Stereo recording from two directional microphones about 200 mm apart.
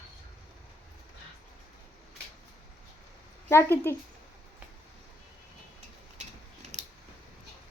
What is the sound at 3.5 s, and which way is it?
Speech, 10° left (ahead or behind).